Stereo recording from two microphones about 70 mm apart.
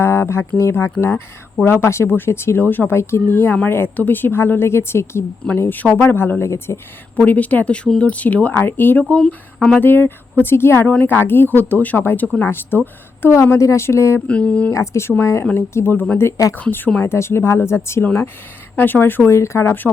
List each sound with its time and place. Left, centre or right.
0.0 s speech: left
5.5 s speech: left
7.2 s speech: left
9.0 s speech: centre
9.8 s speech: left
13.3 s speech: left
14.3 s speech: centre
14.7 s speech: left
19.3 s speech: left